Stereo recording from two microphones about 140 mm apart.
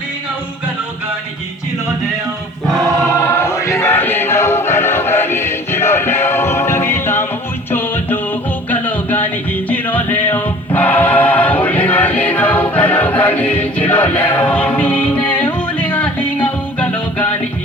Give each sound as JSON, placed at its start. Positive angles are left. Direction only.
{"t": 2.6, "sound": "choir", "side_deg": 0}
{"t": 3.2, "sound": "choir", "side_deg": 15}
{"t": 7.7, "sound": "music", "side_deg": 15}